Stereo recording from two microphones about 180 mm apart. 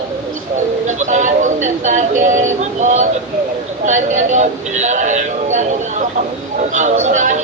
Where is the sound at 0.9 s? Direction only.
40° right (ahead or behind).